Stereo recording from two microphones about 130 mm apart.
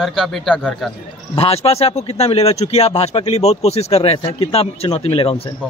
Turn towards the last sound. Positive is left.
turn(degrees=45)  # may be behind; listen again after turning